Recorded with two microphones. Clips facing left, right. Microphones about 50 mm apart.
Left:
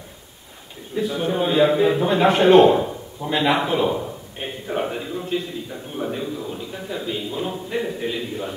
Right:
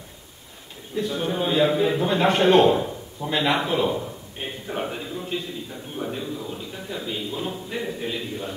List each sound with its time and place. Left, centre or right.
0.9 s a man's voice: centre